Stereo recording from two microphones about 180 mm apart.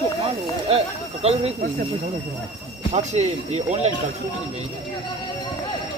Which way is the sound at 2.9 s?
40° right (ahead or behind).